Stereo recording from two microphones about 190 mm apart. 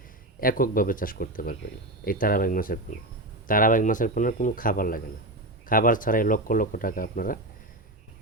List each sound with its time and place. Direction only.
0.3 s speech: 50° left (ahead or behind)